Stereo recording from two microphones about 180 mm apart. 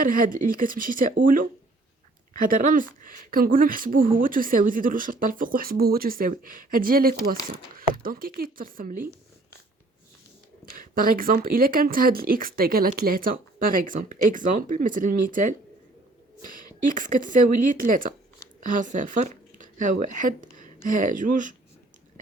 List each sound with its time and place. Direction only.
0.0 s speech: 50° right (ahead or behind)
2.5 s speech: 50° right (ahead or behind)
10.8 s speech: 50° right (ahead or behind)